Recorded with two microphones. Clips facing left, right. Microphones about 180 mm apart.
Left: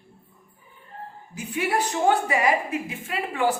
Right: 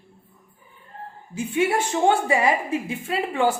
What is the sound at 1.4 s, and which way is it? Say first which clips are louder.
A woman's voice: right 4 dB; 25° right (ahead or behind).